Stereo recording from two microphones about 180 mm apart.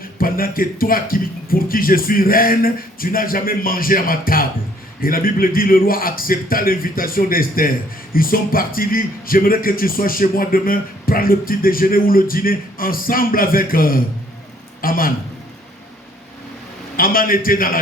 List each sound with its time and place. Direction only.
0.0 s speech: 55° left (ahead or behind)
17.0 s speech: 55° left (ahead or behind)